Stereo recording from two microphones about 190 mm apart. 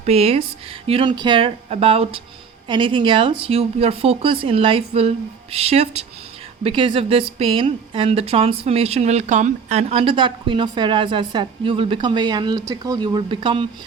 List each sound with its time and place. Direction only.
0.0 s a woman's voice: 30° right (ahead or behind)